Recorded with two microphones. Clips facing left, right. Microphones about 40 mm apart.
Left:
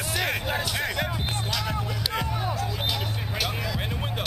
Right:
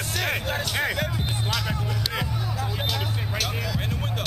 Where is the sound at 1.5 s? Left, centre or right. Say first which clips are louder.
Right 1 dB; centre.